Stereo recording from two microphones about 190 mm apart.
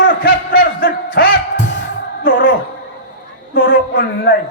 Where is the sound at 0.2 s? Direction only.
50° left (ahead or behind).